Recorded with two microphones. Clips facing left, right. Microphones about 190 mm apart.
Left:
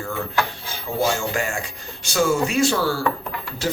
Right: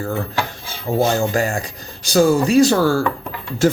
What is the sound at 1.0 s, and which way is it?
Speech, 35° right (ahead or behind).